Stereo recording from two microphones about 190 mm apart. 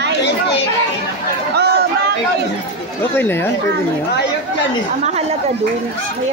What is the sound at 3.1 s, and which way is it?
Speech, 10° left (ahead or behind).